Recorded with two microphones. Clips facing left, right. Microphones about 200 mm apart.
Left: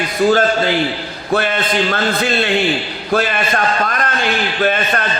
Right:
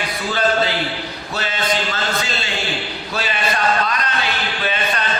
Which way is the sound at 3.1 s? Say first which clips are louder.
Left 7 dB; 50° left (ahead or behind).